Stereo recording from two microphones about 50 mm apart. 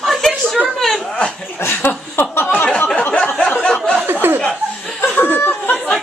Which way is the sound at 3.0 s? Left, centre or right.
Left.